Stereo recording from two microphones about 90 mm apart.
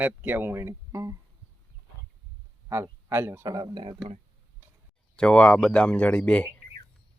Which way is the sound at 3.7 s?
65° right (ahead or behind).